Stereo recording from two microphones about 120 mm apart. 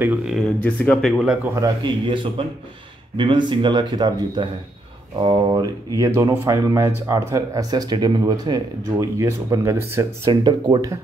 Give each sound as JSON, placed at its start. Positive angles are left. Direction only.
{"t": 0.0, "sound": "speech", "side_deg": -10}
{"t": 0.4, "sound": "speech", "side_deg": 10}
{"t": 1.5, "sound": "speech", "side_deg": -30}
{"t": 2.0, "sound": "a man's voice", "side_deg": -45}
{"t": 10.2, "sound": "speech", "side_deg": -40}